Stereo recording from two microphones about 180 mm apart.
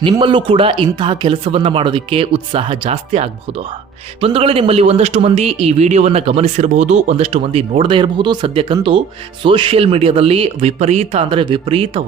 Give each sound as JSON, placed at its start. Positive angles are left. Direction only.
{"t": 0.0, "sound": "a man's voice", "side_deg": -25}